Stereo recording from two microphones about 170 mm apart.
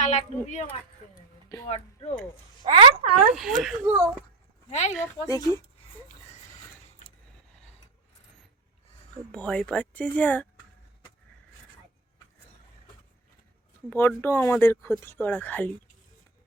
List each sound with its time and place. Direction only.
0.0 s a woman's voice: 45° left (ahead or behind)
2.6 s speech: 30° right (ahead or behind)
3.3 s speech: centre (ahead or behind)
4.7 s a woman's voice: 40° left (ahead or behind)
5.2 s speech: 20° left (ahead or behind)
9.3 s speech: 5° left (ahead or behind)
13.9 s speech: 10° left (ahead or behind)